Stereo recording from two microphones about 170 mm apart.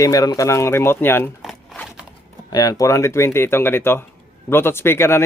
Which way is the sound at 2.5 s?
20° left (ahead or behind).